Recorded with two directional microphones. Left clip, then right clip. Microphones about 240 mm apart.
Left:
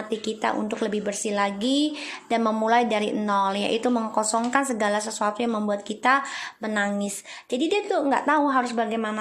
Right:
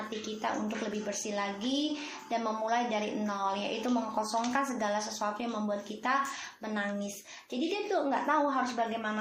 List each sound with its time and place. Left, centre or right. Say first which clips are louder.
0.4 s a woman's voice: left 8 dB; left